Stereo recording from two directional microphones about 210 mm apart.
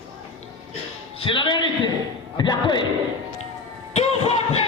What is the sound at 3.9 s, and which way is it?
Music, 30° left (ahead or behind).